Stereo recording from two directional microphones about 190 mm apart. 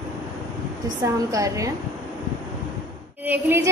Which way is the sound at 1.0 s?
15° right (ahead or behind).